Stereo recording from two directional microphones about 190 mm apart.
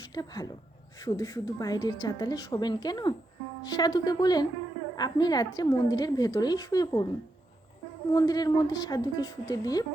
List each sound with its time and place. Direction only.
0.1 s a woman's voice: 20° left (ahead or behind)
8.1 s a woman's voice: 20° left (ahead or behind)